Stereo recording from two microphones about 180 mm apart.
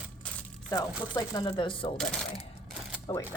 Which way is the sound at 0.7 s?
20° left (ahead or behind).